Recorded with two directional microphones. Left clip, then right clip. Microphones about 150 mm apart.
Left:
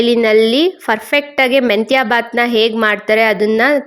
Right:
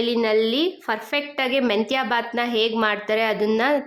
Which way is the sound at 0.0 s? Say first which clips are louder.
Left 9 dB; 40° left (ahead or behind).